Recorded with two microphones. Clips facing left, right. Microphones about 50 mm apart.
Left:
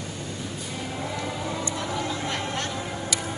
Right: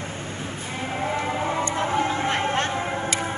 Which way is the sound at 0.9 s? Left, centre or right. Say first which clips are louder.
Right 7 dB; right.